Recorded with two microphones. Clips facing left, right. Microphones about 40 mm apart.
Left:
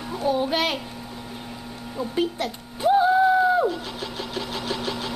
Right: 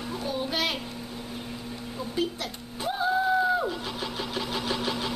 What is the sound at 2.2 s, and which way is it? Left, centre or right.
Speech, left.